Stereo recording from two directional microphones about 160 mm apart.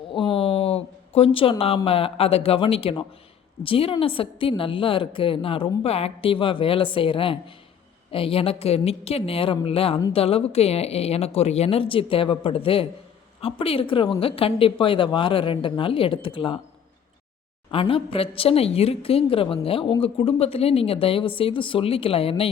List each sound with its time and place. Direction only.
0.1 s a woman's voice: 35° left (ahead or behind)
17.7 s a woman's voice: 35° left (ahead or behind)